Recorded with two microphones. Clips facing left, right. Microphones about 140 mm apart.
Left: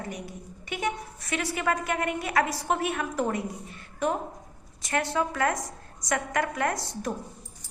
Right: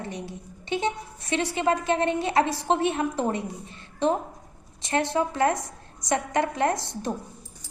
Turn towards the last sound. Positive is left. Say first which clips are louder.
# right 3 dB
turn(degrees=-25)  # may be behind; listen again after turning